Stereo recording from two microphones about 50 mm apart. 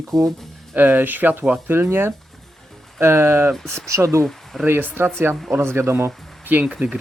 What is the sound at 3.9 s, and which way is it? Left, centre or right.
Speech, right.